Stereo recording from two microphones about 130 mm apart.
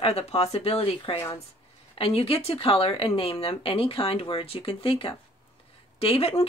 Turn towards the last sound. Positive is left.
turn(degrees=50)  # may be behind; listen again after turning